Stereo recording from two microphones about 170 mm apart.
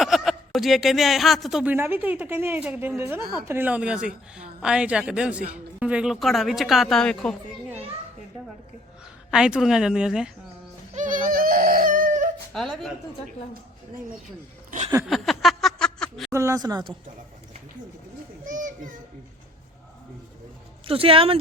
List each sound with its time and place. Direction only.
0.0 s speech: centre (ahead or behind)
1.7 s a woman's voice: 10° right (ahead or behind); by 7.3 s 5° left (ahead or behind)
9.3 s a woman's voice: 5° right (ahead or behind)
10.9 s baby cry: 50° right (ahead or behind)
12.5 s a woman's voice: centre (ahead or behind)
15.0 s a sound: centre (ahead or behind)
16.3 s speech: 20° right (ahead or behind)
18.4 s children playing: 50° right (ahead or behind)
20.8 s speech: 35° right (ahead or behind)